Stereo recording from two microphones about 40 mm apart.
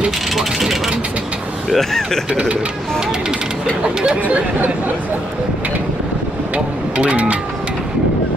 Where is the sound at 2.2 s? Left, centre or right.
Right.